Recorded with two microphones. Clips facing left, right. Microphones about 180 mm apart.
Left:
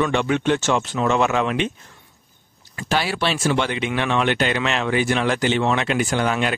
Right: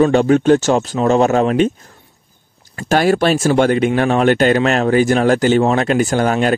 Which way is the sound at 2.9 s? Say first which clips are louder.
Right 9 dB; 45° right (ahead or behind).